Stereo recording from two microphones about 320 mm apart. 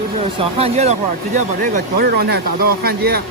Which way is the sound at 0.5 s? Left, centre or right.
Centre.